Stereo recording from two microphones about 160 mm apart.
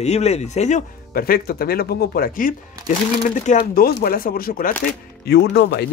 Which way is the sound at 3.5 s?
50° left (ahead or behind).